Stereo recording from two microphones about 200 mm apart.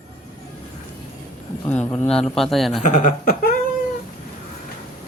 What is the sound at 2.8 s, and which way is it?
Speech, 40° left (ahead or behind).